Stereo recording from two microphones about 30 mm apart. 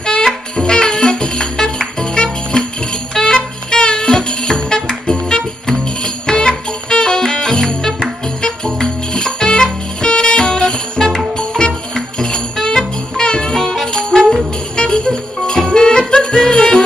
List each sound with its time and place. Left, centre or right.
0.0 s music: left
14.8 s music: left